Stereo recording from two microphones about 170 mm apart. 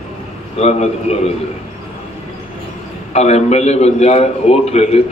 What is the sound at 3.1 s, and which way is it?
A man's voice, 40° left (ahead or behind).